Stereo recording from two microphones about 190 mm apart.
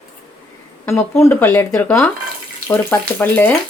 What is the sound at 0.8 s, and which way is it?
Speech, 15° left (ahead or behind).